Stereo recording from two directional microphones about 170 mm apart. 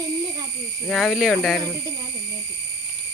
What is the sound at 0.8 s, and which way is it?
Speech, centre (ahead or behind).